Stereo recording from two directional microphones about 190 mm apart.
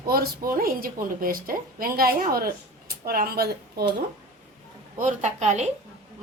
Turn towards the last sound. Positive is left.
turn(degrees=-40)  # may be behind; listen again after turning